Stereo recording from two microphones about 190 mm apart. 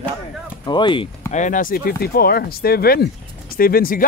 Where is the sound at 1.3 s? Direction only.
40° left (ahead or behind).